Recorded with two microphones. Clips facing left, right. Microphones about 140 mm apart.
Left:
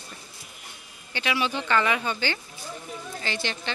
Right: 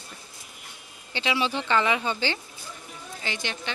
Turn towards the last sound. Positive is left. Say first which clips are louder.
# left 2 dB
turn(degrees=-15)  # may be behind; listen again after turning